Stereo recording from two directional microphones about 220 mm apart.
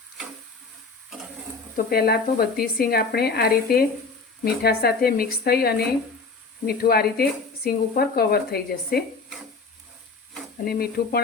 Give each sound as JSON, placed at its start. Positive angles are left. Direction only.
{"t": 1.7, "sound": "speech", "side_deg": 45}
{"t": 10.7, "sound": "speech", "side_deg": 45}